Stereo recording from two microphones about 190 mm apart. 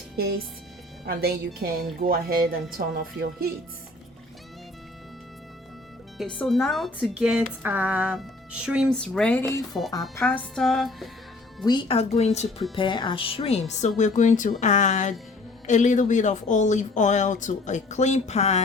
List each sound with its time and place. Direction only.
0.2 s a woman's voice: 60° right (ahead or behind)
6.1 s speech: 5° left (ahead or behind)
11.6 s speech: 25° left (ahead or behind)